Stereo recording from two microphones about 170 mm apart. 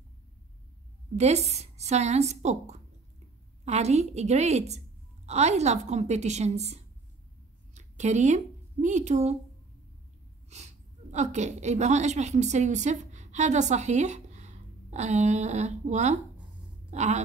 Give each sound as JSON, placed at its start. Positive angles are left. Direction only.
{"t": 1.1, "sound": "a woman's voice", "side_deg": -40}
{"t": 7.7, "sound": "a sound", "side_deg": -45}
{"t": 8.8, "sound": "speech", "side_deg": -45}
{"t": 10.5, "sound": "a woman's voice", "side_deg": -40}